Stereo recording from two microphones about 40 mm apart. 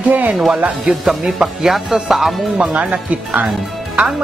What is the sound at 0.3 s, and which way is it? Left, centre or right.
Speech, centre.